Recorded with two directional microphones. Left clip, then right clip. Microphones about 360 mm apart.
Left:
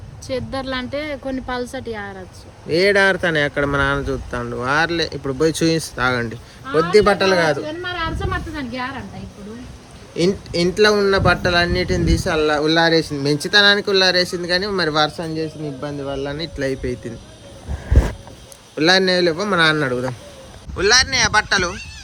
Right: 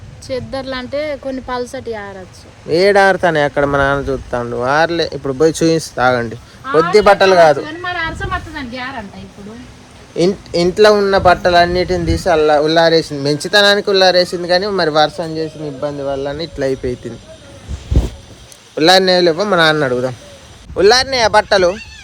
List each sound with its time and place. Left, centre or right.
0.3 s a woman's voice: centre
2.6 s speech: centre
8.0 s a sound: centre
10.2 s speech: centre
18.8 s speech: centre